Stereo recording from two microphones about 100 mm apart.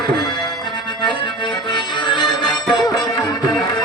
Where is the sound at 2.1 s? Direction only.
50° left (ahead or behind).